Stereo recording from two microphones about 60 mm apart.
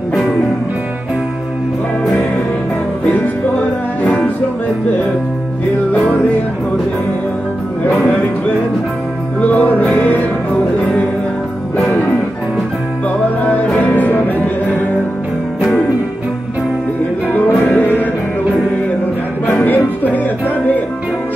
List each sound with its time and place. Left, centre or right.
0.1 s music: centre
9.4 s music: left
13.8 s music: left
17.7 s music: left
19.4 s music: left